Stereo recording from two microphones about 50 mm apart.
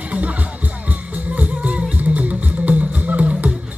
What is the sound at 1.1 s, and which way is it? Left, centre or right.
Music, right.